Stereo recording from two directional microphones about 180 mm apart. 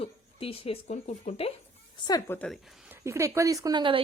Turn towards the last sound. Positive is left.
turn(degrees=-25)  # may be behind; listen again after turning